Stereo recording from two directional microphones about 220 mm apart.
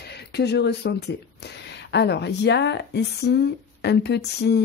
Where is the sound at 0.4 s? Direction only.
50° left (ahead or behind).